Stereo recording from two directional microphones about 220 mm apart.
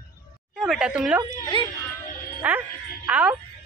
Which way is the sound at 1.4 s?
20° left (ahead or behind).